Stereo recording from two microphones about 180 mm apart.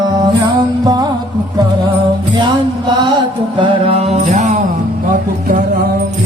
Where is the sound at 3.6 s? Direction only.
30° right (ahead or behind).